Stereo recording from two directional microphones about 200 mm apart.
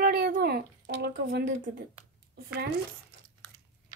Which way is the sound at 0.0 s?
50° right (ahead or behind).